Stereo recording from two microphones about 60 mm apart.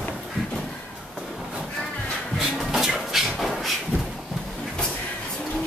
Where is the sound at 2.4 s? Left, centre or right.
Centre.